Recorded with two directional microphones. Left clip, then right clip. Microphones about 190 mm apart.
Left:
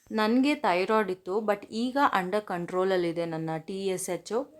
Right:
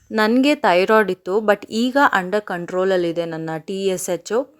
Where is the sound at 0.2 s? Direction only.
30° right (ahead or behind).